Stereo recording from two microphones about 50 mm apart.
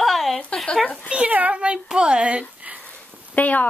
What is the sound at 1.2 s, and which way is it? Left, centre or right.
A child's voice, right.